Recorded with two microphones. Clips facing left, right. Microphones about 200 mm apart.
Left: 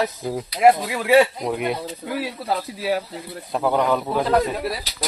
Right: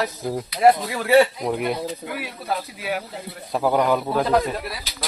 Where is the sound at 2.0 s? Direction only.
20° right (ahead or behind).